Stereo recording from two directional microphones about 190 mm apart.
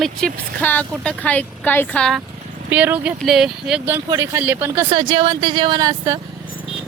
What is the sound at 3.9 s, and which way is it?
Speech, 15° right (ahead or behind).